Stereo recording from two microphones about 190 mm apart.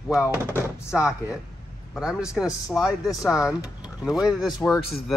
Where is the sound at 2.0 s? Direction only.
5° right (ahead or behind).